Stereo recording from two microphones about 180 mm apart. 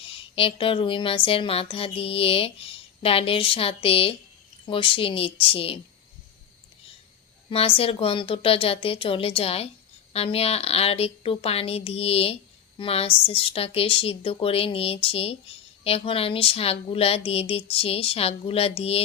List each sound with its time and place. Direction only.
0.0 s a woman's voice: 30° left (ahead or behind)
7.5 s a woman's voice: 30° left (ahead or behind)